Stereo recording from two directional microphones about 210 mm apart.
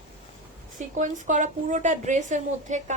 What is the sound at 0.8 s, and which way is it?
A woman's voice, 35° right (ahead or behind).